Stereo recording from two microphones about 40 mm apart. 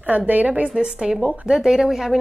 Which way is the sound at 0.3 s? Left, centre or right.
Right.